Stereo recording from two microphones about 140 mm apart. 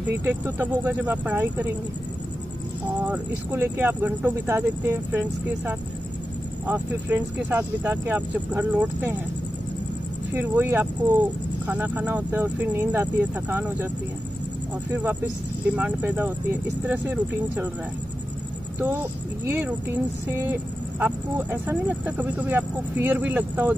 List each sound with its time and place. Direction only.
0.2 s speech: 15° right (ahead or behind)
3.1 s speech: 15° right (ahead or behind)
6.6 s speech: 10° right (ahead or behind)
10.3 s speech: 15° right (ahead or behind)
14.9 s speech: 15° right (ahead or behind)
19.4 s speech: 15° right (ahead or behind)